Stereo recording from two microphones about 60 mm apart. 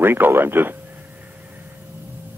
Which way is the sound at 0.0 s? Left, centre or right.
Right.